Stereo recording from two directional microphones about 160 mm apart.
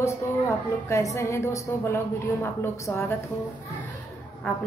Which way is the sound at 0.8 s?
20° left (ahead or behind).